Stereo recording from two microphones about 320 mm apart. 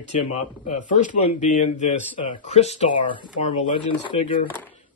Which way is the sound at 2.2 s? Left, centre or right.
Left.